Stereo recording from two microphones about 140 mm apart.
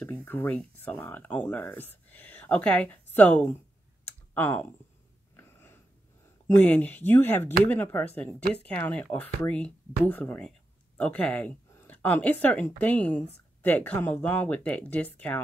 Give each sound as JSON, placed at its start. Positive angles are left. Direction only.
{"t": 0.0, "sound": "speech", "side_deg": 15}
{"t": 5.3, "sound": "a sound", "side_deg": 15}
{"t": 6.4, "sound": "speech", "side_deg": 10}